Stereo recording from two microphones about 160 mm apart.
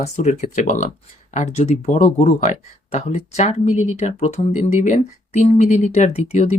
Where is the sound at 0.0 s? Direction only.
45° left (ahead or behind).